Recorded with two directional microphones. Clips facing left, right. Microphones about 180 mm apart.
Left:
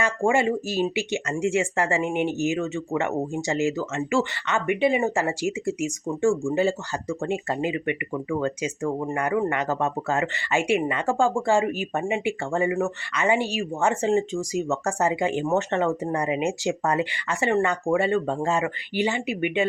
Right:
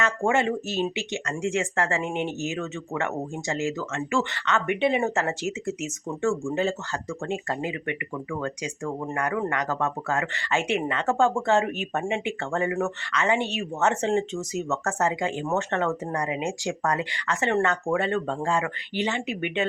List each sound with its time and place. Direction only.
0.0 s speech: 10° left (ahead or behind)
18.4 s speech: 20° left (ahead or behind)